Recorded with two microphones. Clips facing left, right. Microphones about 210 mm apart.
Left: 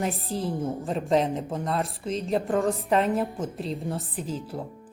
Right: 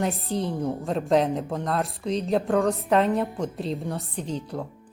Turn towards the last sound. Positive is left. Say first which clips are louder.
# right 1 dB
turn(degrees=5)  # may be behind; listen again after turning